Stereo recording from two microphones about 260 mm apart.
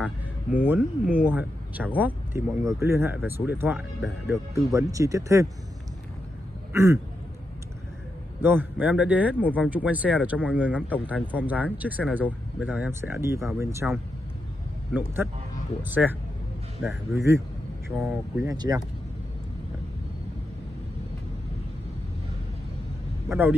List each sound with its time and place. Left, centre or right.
1.0 s speech: left
1.3 s speech: centre
6.7 s speech: centre
8.4 s speech: centre
15.8 s speech: centre
23.2 s speech: centre